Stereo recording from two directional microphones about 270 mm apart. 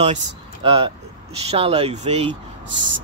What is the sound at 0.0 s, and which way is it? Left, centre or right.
Speech, right.